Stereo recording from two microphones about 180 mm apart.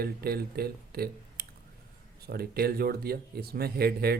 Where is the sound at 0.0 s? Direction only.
60° right (ahead or behind).